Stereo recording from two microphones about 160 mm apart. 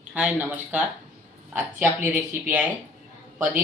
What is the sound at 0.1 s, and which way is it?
Speech, 5° right (ahead or behind).